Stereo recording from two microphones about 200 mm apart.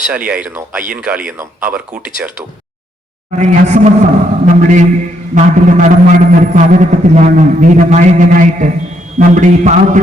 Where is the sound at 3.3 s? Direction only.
35° right (ahead or behind).